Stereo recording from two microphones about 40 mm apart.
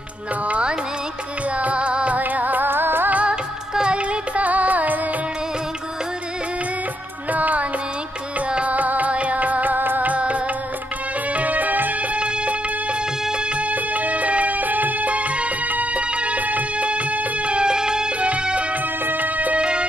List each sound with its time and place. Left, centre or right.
0.5 s music: right
2.2 s music: right
3.7 s music: right
4.5 s music: right
7.2 s music: right
8.6 s music: right
10.1 s music: right
13.6 s music: right
19.0 s music: right
19.6 s music: right